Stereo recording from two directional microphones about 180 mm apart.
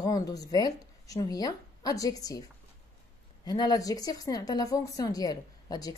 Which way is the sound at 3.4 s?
20° left (ahead or behind).